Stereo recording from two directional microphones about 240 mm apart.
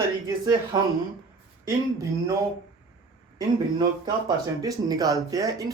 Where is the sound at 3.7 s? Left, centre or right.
Centre.